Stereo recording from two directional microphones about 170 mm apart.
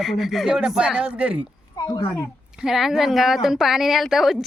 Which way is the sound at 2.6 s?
Centre (ahead or behind).